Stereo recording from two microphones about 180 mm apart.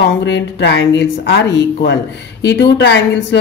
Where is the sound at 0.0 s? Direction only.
75° left (ahead or behind).